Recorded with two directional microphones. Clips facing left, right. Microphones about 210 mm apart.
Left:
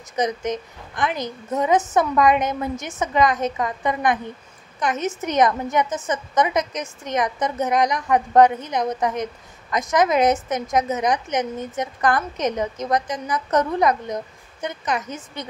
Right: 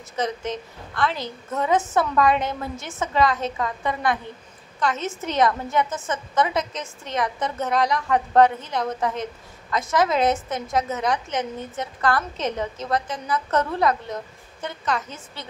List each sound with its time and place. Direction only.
0.1 s a woman's voice: 15° left (ahead or behind)